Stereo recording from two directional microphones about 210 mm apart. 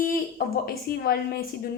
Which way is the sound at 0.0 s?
45° left (ahead or behind).